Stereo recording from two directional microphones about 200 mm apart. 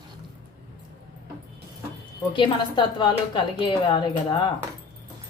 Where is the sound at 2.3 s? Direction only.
25° left (ahead or behind).